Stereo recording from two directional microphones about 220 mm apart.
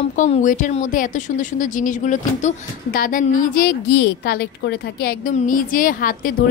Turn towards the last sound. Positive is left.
turn(degrees=40)  # may be behind; listen again after turning